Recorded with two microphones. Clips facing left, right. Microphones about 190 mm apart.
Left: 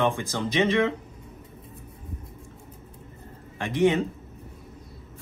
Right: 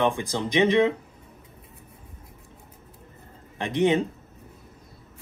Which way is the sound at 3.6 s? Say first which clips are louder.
Even; 15° right (ahead or behind).